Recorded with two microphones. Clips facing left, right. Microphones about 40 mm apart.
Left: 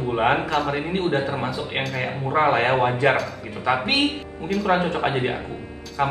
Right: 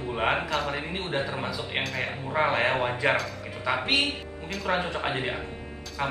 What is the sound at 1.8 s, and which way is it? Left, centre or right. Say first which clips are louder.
Speech: left 4 dB; centre.